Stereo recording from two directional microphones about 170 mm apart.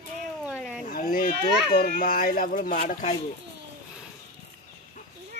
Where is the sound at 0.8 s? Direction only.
55° left (ahead or behind).